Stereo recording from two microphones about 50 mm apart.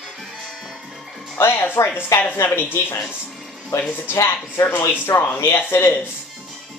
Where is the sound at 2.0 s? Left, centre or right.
Left.